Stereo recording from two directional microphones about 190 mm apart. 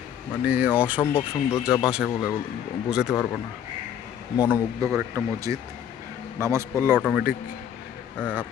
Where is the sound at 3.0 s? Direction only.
15° left (ahead or behind).